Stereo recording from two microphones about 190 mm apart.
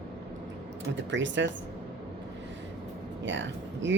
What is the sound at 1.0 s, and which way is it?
Speech, 70° right (ahead or behind).